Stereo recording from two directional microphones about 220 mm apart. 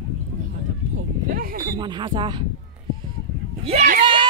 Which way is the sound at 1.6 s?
20° right (ahead or behind).